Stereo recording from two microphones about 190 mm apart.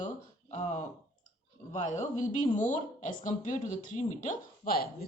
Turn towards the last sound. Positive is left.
turn(degrees=50)  # may be behind; listen again after turning